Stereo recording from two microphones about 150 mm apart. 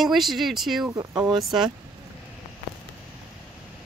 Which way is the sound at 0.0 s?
Centre (ahead or behind).